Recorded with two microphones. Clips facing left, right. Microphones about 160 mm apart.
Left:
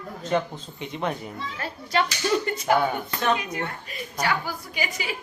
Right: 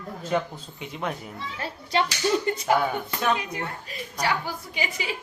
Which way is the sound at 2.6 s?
5° right (ahead or behind).